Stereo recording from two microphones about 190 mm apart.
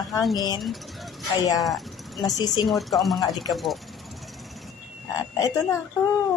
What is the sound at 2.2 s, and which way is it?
Speech, 20° left (ahead or behind).